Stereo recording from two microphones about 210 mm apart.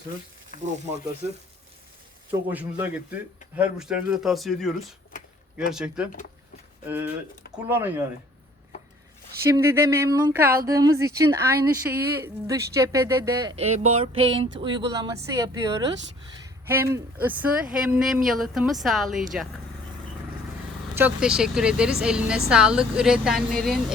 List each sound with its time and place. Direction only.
2.5 s a woman's voice: 10° right (ahead or behind)
9.4 s speech: 15° right (ahead or behind)
13.6 s a sound: 30° right (ahead or behind)
14.6 s a woman's voice: 20° right (ahead or behind); by 19.2 s centre (ahead or behind)
20.9 s a woman's voice: 5° right (ahead or behind)